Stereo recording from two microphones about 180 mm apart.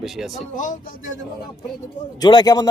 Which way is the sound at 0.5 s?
45° left (ahead or behind).